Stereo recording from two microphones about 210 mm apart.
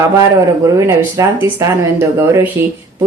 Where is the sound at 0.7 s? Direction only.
15° right (ahead or behind).